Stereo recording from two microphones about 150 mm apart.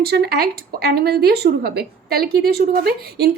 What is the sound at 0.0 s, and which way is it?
A woman's voice, 90° right.